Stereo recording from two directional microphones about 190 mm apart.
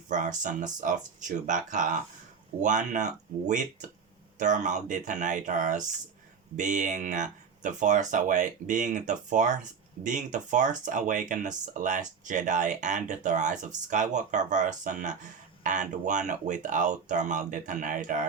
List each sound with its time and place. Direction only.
0.1 s speech: 40° right (ahead or behind)